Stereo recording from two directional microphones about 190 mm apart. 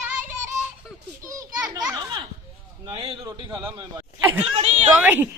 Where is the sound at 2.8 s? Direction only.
30° right (ahead or behind).